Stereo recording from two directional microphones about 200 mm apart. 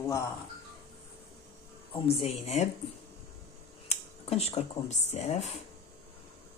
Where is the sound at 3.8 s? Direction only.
30° left (ahead or behind).